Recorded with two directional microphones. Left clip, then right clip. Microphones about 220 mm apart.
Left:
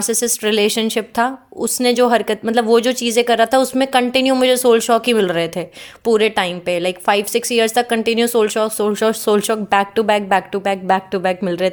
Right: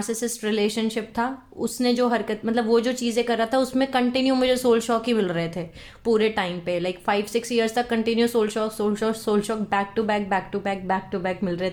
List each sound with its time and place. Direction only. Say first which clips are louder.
0.0 s a woman's voice: left 9 dB; 40° left (ahead or behind)